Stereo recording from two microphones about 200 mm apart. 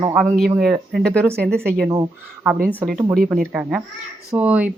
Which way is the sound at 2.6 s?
5° right (ahead or behind).